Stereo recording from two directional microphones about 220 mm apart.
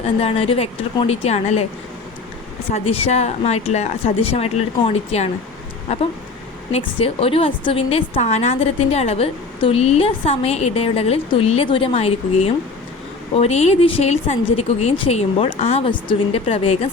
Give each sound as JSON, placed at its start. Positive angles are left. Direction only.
{"t": 0.2, "sound": "a woman's voice", "side_deg": 25}
{"t": 2.7, "sound": "a woman's voice", "side_deg": 25}
{"t": 6.7, "sound": "a woman's voice", "side_deg": 25}